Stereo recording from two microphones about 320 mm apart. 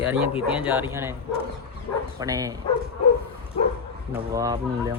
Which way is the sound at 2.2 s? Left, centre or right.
Centre.